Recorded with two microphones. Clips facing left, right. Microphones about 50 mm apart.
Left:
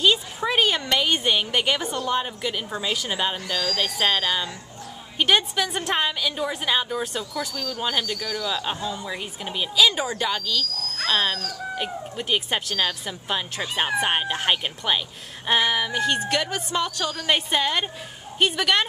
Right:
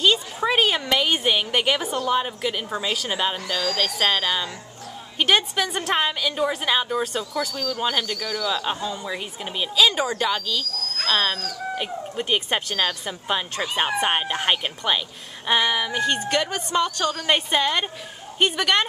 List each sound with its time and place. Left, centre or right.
0.4 s a woman's voice: centre